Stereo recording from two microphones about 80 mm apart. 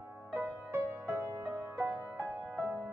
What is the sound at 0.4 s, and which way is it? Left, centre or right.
Music, right.